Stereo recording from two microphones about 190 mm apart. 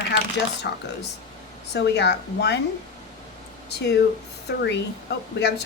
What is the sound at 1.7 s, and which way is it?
Speech, 65° left (ahead or behind).